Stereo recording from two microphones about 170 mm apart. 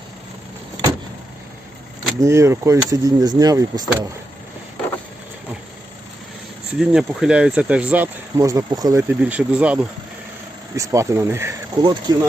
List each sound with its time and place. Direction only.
2.1 s speech: 15° right (ahead or behind)
6.7 s speech: 5° right (ahead or behind)
8.4 s speech: 20° right (ahead or behind)
10.8 s speech: 20° right (ahead or behind)
11.8 s speech: 25° right (ahead or behind)